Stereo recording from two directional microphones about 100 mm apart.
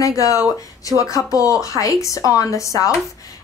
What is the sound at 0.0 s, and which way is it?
A woman's voice, 35° left (ahead or behind).